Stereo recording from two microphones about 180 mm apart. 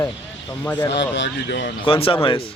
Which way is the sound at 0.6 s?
15° left (ahead or behind).